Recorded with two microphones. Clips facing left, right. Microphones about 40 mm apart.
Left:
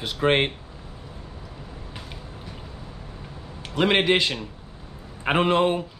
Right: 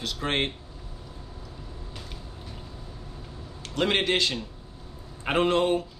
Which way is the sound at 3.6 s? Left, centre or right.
Centre.